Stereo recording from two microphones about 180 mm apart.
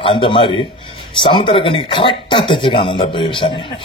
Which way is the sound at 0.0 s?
30° left (ahead or behind).